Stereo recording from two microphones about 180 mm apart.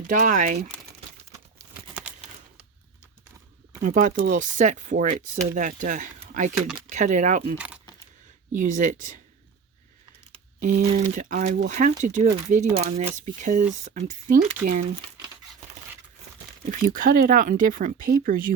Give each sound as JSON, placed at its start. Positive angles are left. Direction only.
{"t": 0.1, "sound": "speech", "side_deg": -45}
{"t": 1.7, "sound": "crumpling", "side_deg": -10}
{"t": 3.7, "sound": "speech", "side_deg": -45}
{"t": 8.5, "sound": "speech", "side_deg": -45}
{"t": 10.6, "sound": "speech", "side_deg": -45}
{"t": 16.6, "sound": "speech", "side_deg": -50}